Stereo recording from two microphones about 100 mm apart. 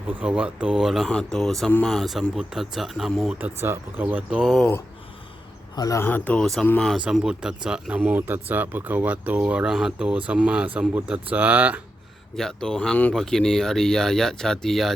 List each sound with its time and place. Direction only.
0.1 s speech: 15° right (ahead or behind)
3.3 s speech: 20° right (ahead or behind)
5.7 s speech: 40° left (ahead or behind)
6.0 s speech: 20° left (ahead or behind)
6.4 s speech: 5° left (ahead or behind)
6.9 s speech: 5° right (ahead or behind)
12.4 s speech: 5° left (ahead or behind)